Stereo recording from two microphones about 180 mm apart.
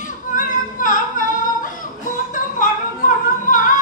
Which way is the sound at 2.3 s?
45° left (ahead or behind).